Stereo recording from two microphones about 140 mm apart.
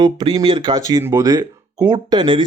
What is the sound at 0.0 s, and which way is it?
Speech, 35° right (ahead or behind).